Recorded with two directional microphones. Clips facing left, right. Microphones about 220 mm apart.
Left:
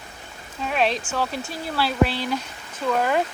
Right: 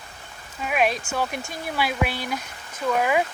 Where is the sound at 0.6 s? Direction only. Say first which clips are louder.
Even; 10° right (ahead or behind).